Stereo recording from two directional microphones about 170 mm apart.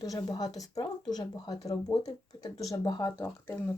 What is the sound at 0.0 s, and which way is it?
Speech, 20° left (ahead or behind).